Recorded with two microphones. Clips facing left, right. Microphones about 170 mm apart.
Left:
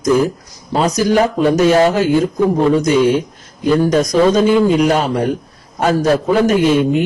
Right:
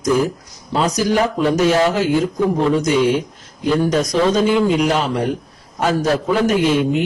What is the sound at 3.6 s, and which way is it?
A man's voice, 45° left (ahead or behind).